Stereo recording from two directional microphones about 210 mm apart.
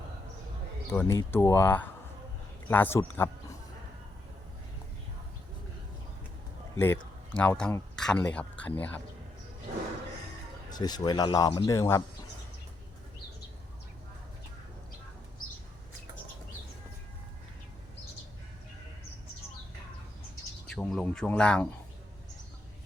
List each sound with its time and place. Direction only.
0.9 s speech: 10° left (ahead or behind)
6.7 s speech: 10° left (ahead or behind)
10.7 s speech: 20° left (ahead or behind)
20.7 s speech: 5° left (ahead or behind)